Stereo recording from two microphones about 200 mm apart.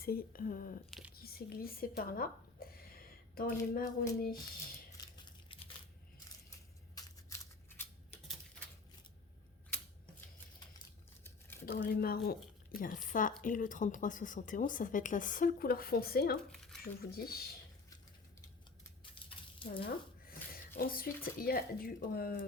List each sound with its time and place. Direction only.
0.0 s speech: 50° left (ahead or behind)
0.9 s speech: centre (ahead or behind)
1.1 s speech: 50° left (ahead or behind)
4.9 s a sound: 20° left (ahead or behind)
6.9 s scissors: 15° left (ahead or behind)
11.2 s crumpling: 10° left (ahead or behind)
11.6 s a woman's voice: 50° left (ahead or behind)
16.5 s a sound: centre (ahead or behind)
16.8 s speech: 50° left (ahead or behind)
19.1 s a sound: 25° left (ahead or behind)
19.8 s a sound: 45° left (ahead or behind)
20.7 s speech: 45° left (ahead or behind)